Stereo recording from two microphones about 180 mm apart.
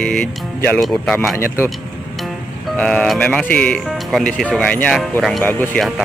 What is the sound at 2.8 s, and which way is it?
Speech, 5° left (ahead or behind).